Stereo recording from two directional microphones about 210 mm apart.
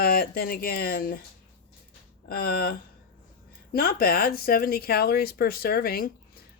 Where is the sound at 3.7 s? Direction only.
45° left (ahead or behind).